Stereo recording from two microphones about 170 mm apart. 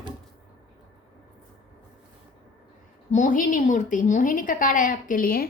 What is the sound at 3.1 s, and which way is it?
A woman's voice, 50° left (ahead or behind).